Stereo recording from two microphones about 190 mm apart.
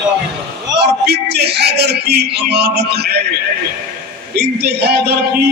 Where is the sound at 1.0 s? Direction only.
60° right (ahead or behind).